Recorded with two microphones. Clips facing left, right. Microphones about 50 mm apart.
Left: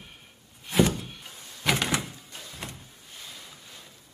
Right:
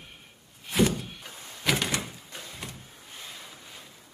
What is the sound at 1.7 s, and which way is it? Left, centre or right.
Door, centre.